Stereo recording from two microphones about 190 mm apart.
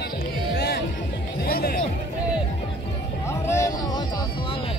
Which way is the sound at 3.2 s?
15° left (ahead or behind).